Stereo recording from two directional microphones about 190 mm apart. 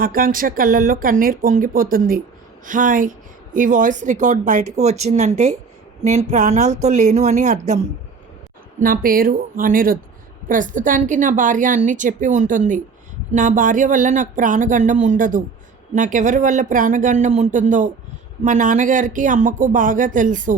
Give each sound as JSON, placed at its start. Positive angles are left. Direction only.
{"t": 0.0, "sound": "a woman's voice", "side_deg": -50}
{"t": 8.8, "sound": "a woman's voice", "side_deg": -50}